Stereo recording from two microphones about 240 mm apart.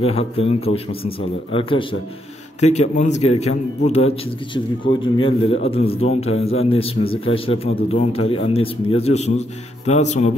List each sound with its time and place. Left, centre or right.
0.0 s a man's voice: left